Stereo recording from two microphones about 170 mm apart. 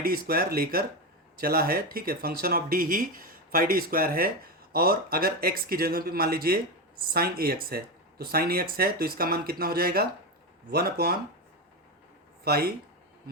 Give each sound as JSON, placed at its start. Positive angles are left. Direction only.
{"t": 0.0, "sound": "speech", "side_deg": -60}
{"t": 12.5, "sound": "speech", "side_deg": -65}